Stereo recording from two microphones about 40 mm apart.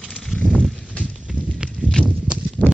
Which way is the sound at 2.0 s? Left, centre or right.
Left.